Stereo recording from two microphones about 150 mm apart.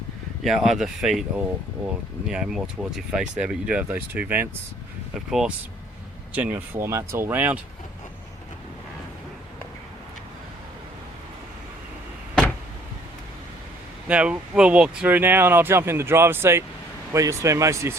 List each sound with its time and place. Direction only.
0.4 s speech: centre (ahead or behind)
2.2 s speech: 5° right (ahead or behind)
14.1 s speech: 5° right (ahead or behind)